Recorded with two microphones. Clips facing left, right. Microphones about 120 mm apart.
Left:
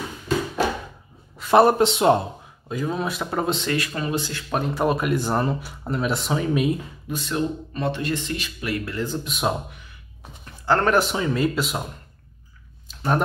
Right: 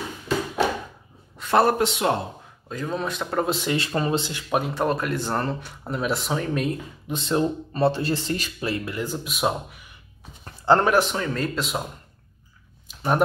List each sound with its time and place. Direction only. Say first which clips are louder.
1.5 s speech: left 4 dB; 20° left (ahead or behind)
2.7 s speech: left 2 dB; 5° left (ahead or behind)
3.7 s speech: right 2 dB; 30° right (ahead or behind)
4.2 s speech: left 1 dB; 20° right (ahead or behind)
4.5 s speech: right 1 dB; 5° right (ahead or behind)
4.8 s speech: left 3 dB; 10° left (ahead or behind)
7.1 s speech: right 2 dB; 25° right (ahead or behind)
8.8 s speech: left 2 dB; 15° right (ahead or behind)
11.0 s speech: left 2 dB; 5° left (ahead or behind)
12.8 s a sound: even; 5° right (ahead or behind)